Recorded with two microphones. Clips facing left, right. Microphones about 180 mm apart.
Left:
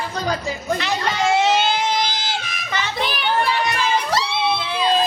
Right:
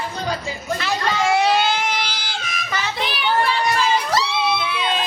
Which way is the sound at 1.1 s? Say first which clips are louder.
Even; 25° left (ahead or behind).